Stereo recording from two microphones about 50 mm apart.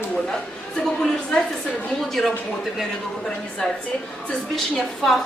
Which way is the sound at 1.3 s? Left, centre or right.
Centre.